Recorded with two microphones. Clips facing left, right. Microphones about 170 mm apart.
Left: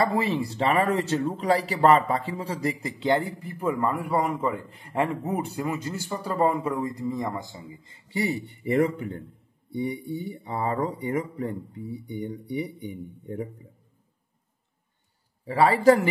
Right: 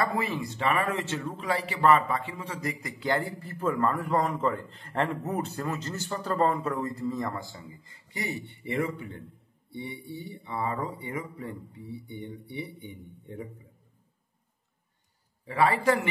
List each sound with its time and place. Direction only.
0.0 s speech: 30° left (ahead or behind)
15.4 s a man's voice: 30° left (ahead or behind)